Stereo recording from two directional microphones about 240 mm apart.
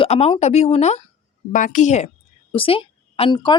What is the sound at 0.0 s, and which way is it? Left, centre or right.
A woman's voice, left.